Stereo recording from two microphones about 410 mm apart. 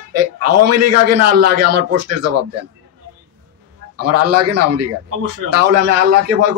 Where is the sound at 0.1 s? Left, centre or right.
Right.